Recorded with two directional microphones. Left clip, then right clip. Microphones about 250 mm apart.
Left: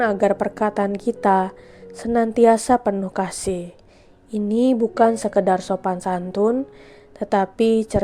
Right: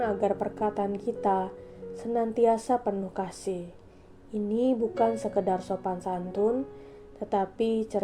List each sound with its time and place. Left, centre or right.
0.0 s a woman's voice: left